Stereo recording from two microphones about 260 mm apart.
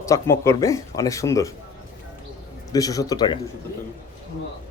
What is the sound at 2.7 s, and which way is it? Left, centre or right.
Speech, centre.